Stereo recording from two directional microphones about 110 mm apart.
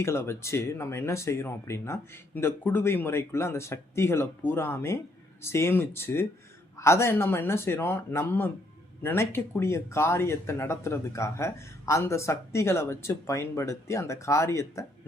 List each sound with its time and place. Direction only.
0.0 s speech: 25° left (ahead or behind)